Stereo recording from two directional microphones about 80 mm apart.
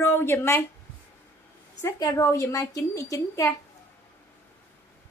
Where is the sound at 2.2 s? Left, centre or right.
Left.